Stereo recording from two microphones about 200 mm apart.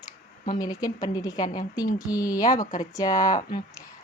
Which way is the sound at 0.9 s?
20° left (ahead or behind).